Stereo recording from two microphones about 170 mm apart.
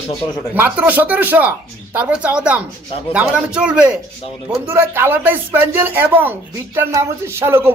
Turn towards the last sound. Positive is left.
turn(degrees=-15)  # may be behind; listen again after turning